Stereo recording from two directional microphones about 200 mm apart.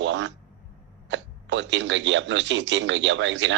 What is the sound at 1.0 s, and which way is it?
Speech, 65° right (ahead or behind).